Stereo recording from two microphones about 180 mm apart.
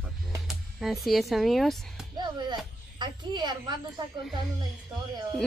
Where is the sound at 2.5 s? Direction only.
25° right (ahead or behind).